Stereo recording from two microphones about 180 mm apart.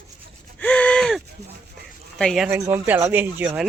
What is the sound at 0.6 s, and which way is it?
Gasp, 10° left (ahead or behind).